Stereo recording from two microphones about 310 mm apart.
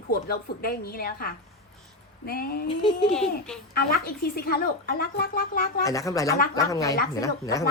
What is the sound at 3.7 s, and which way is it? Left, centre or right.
Speech, left.